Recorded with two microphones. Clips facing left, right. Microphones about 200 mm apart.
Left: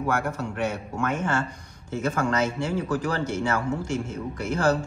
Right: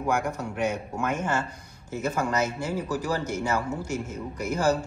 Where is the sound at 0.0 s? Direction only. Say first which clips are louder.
Even; 15° right (ahead or behind).